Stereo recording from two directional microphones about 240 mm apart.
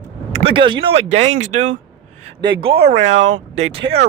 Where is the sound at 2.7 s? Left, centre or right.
Right.